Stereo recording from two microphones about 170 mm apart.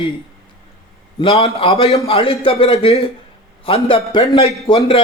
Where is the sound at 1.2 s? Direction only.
35° left (ahead or behind).